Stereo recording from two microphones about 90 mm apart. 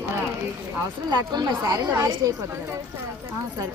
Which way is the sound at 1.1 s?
50° right (ahead or behind).